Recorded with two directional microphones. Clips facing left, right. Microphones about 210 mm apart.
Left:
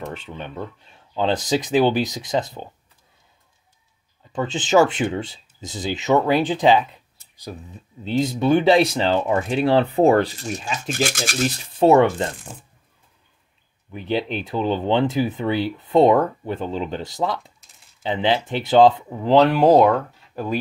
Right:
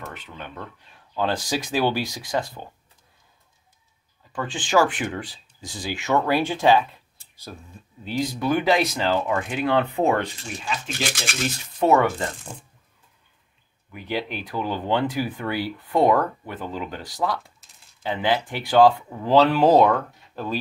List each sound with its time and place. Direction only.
0.1 s speech: 25° left (ahead or behind)
4.3 s speech: 20° left (ahead or behind); by 11.3 s 45° left (ahead or behind)
11.8 s speech: 30° left (ahead or behind)
13.9 s speech: 25° left (ahead or behind)
17.6 s a sound: centre (ahead or behind)
18.0 s speech: 25° left (ahead or behind)